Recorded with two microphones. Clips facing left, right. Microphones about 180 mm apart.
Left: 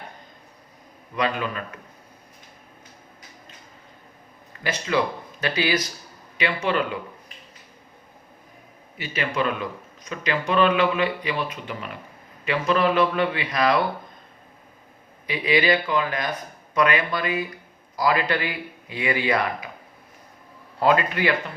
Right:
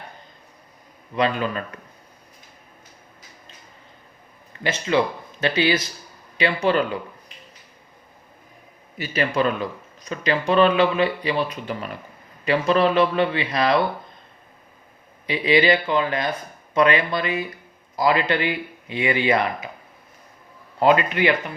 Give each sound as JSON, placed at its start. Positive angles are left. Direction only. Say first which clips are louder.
{"t": 1.1, "sound": "speech", "louder": "right 3 dB", "side_deg": -30}
{"t": 4.6, "sound": "speech", "louder": "right 3 dB", "side_deg": -25}
{"t": 9.0, "sound": "speech", "louder": "right 4 dB", "side_deg": -40}
{"t": 15.3, "sound": "speech", "louder": "right 3 dB", "side_deg": -25}
{"t": 20.7, "sound": "speech", "louder": "right 3 dB", "side_deg": -20}